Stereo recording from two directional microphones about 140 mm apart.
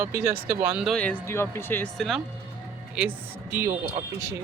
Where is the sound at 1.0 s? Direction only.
15° left (ahead or behind).